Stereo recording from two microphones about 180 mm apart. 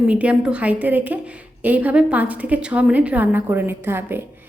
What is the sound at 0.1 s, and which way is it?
Speech, 5° right (ahead or behind).